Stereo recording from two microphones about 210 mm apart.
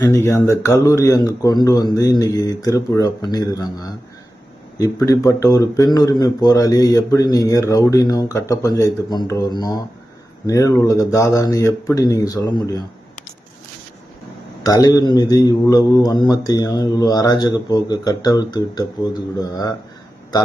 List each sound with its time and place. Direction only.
0.0 s speech: 15° left (ahead or behind)
14.6 s a man's voice: 15° left (ahead or behind)